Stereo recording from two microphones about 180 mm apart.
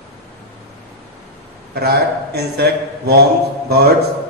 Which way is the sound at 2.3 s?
65° right (ahead or behind).